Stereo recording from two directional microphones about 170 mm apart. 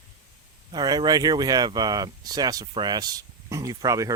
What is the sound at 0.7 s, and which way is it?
Speech, 25° right (ahead or behind).